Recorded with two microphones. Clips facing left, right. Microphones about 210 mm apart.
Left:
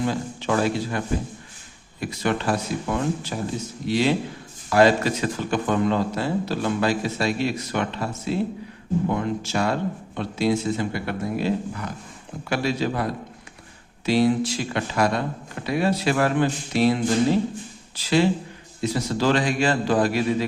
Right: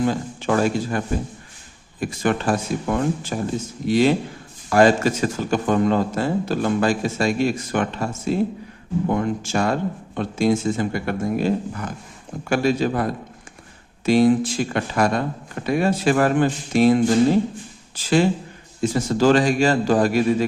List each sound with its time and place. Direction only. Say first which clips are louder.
0.0 s speech: right 3 dB; 50° right (ahead or behind)